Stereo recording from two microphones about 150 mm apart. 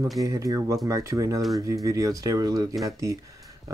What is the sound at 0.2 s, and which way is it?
Speech, 25° right (ahead or behind).